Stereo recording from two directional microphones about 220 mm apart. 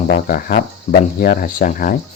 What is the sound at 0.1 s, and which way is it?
Speech, 40° left (ahead or behind).